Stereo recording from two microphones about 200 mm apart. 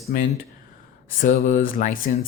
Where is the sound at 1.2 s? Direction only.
40° left (ahead or behind).